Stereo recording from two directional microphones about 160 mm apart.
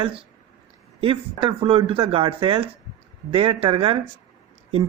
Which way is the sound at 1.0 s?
35° right (ahead or behind).